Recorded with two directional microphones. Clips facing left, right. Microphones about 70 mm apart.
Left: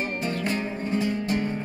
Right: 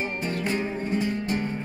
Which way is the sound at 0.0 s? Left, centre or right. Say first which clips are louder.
Left 1 dB; right.